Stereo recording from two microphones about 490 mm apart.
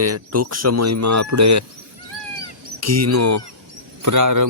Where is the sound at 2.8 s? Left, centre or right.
Right.